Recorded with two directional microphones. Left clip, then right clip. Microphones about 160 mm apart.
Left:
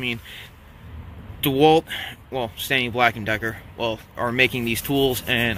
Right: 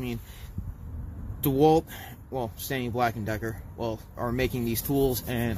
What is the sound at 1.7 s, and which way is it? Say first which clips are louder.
Speech: left 6 dB; centre (ahead or behind).